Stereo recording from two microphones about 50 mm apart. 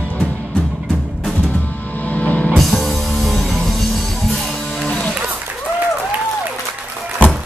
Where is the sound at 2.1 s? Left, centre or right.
Left.